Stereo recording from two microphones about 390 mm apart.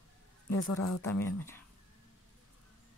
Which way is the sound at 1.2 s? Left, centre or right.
Centre.